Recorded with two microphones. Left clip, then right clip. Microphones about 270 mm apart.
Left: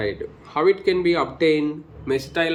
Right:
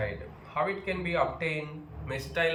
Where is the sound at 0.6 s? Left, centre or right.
Left.